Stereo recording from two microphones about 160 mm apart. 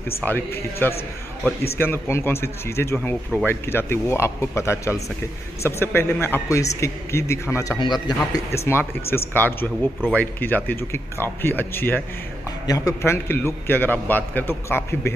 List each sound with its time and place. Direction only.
0.2 s speech: 10° left (ahead or behind)